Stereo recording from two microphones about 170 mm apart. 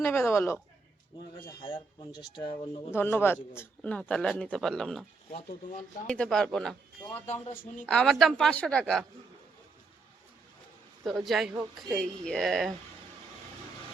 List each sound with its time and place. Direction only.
0.0 s speech: 15° left (ahead or behind)
1.4 s speech: 30° left (ahead or behind)
2.9 s speech: 15° left (ahead or behind)
6.1 s speech: 5° left (ahead or behind)
7.3 s speech: 40° left (ahead or behind)
7.5 s a woman's voice: 55° left (ahead or behind)
7.9 s speech: 5° left (ahead or behind)
11.0 s speech: centre (ahead or behind)